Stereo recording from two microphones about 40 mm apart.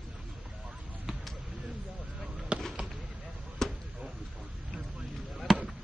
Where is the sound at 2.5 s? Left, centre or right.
Right.